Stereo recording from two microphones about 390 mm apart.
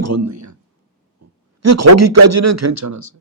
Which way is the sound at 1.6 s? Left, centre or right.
Right.